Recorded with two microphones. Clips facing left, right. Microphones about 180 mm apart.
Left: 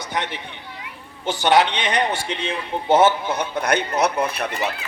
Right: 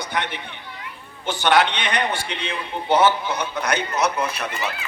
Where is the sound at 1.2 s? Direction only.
40° left (ahead or behind); by 4.4 s 55° left (ahead or behind).